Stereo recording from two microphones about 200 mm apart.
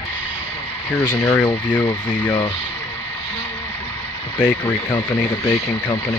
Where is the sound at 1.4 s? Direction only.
25° left (ahead or behind).